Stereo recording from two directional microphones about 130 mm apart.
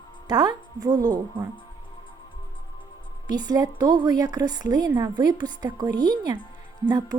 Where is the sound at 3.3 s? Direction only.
35° right (ahead or behind).